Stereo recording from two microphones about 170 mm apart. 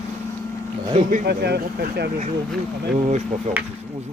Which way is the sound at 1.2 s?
75° right (ahead or behind).